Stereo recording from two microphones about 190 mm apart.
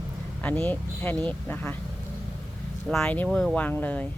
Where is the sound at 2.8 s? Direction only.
5° left (ahead or behind).